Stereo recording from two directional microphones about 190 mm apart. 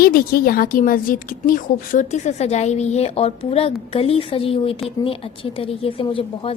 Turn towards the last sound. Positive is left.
turn(degrees=30)  # may be behind; listen again after turning